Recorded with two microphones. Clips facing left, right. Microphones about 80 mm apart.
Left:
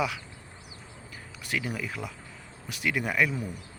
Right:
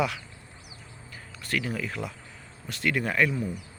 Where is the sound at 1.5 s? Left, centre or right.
Centre.